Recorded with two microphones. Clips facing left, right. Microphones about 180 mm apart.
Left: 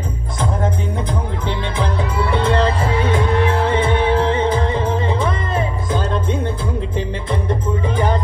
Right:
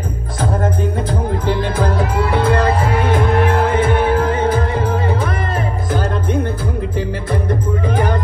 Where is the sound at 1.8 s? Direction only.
55° right (ahead or behind).